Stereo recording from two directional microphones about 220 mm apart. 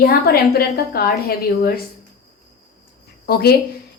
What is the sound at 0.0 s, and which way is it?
A woman's voice, 45° left (ahead or behind).